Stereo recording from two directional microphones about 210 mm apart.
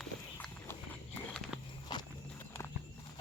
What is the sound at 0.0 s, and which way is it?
Walk, 5° left (ahead or behind).